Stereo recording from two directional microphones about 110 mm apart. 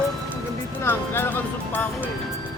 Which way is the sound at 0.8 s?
20° left (ahead or behind).